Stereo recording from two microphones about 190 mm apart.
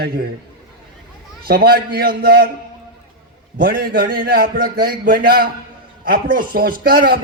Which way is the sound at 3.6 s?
50° right (ahead or behind).